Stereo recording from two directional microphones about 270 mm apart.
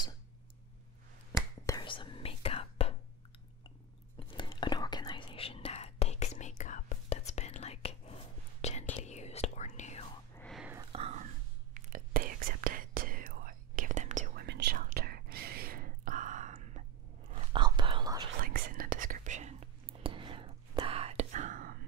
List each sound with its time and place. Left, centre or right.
1.7 s whispering: centre
4.3 s whispering: centre
10.3 s a sound: centre
10.9 s whispering: right
18.4 s whispering: right